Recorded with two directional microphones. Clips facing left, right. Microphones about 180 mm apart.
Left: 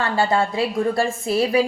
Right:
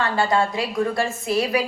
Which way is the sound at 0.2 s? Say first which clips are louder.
Left 2 dB; 30° left (ahead or behind).